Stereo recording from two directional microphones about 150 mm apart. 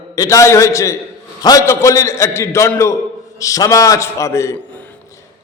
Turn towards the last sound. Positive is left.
turn(degrees=20)  # may be behind; listen again after turning